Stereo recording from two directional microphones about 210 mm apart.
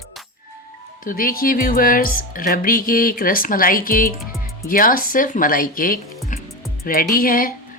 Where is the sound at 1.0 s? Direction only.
45° left (ahead or behind).